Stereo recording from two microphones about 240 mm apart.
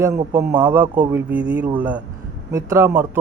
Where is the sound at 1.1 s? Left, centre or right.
Centre.